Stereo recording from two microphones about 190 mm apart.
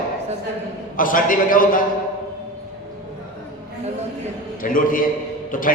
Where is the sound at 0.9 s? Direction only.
45° left (ahead or behind).